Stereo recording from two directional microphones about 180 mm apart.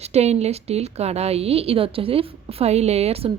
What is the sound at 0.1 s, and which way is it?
A woman's voice, 35° right (ahead or behind).